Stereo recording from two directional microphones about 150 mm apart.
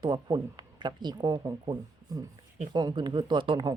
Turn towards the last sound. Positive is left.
turn(degrees=-30)  # may be behind; listen again after turning